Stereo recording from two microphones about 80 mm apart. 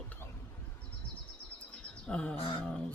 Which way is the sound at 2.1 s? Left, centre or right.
Centre.